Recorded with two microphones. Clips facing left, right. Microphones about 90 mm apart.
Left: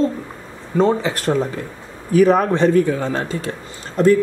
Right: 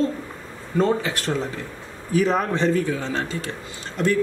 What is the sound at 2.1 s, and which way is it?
A man's voice, 55° left (ahead or behind).